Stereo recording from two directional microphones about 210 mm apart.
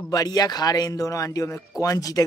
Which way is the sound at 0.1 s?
20° left (ahead or behind).